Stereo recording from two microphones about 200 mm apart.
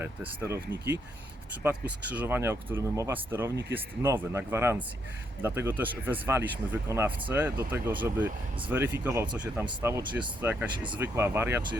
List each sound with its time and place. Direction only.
0.0 s speech: 10° right (ahead or behind)